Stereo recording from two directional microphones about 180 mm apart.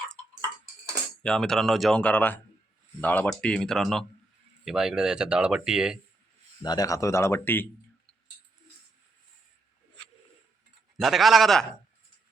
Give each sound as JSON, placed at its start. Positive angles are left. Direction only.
{"t": 1.2, "sound": "speech", "side_deg": 5}
{"t": 6.6, "sound": "speech", "side_deg": 20}
{"t": 10.9, "sound": "speech", "side_deg": 0}